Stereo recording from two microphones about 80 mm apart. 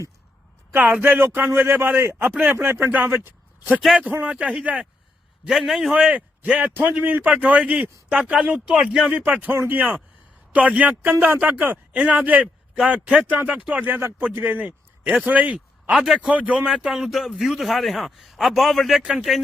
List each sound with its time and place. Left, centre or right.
0.7 s a man's voice: right
5.5 s a man's voice: centre
16.6 s a man's voice: centre